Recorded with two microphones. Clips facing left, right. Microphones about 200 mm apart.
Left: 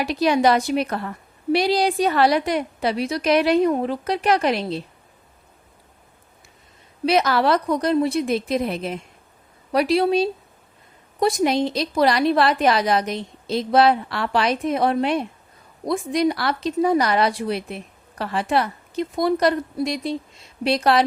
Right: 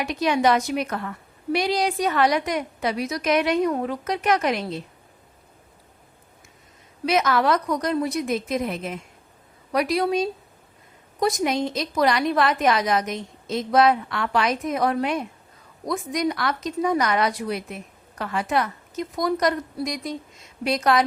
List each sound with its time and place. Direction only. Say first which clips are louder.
0.0 s speech: left 3 dB; 35° left (ahead or behind)
7.0 s speech: left 2 dB; 35° left (ahead or behind)